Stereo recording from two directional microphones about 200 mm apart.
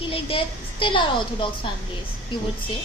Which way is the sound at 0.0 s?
25° left (ahead or behind).